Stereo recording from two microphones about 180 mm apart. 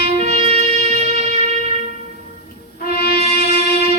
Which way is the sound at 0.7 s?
40° right (ahead or behind).